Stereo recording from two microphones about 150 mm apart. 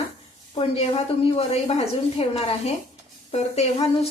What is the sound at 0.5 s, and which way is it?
A woman's voice, 40° left (ahead or behind).